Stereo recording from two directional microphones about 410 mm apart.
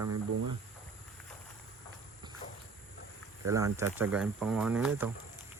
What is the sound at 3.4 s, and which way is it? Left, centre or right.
Speech, centre.